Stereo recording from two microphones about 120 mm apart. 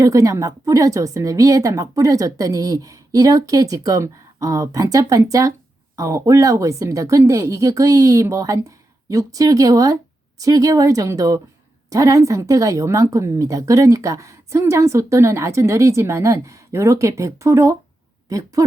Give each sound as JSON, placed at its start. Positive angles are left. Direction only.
{"t": 0.0, "sound": "speech", "side_deg": -25}